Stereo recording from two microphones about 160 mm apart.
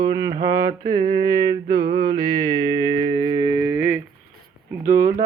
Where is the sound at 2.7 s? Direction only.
25° right (ahead or behind).